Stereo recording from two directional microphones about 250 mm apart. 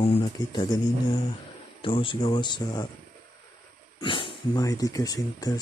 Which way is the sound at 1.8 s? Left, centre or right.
Left.